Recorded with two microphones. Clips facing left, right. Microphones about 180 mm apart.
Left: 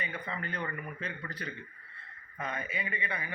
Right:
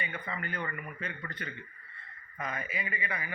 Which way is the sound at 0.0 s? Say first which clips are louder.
Even; 30° left (ahead or behind).